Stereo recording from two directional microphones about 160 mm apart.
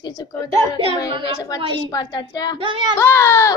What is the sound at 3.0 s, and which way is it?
Speech, 15° left (ahead or behind).